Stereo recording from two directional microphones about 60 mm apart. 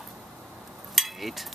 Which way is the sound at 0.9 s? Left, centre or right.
Centre.